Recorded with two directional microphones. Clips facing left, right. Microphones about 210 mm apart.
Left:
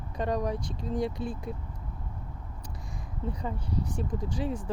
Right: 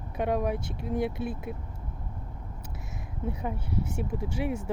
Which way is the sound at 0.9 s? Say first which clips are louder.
Right 1 dB; 60° right (ahead or behind).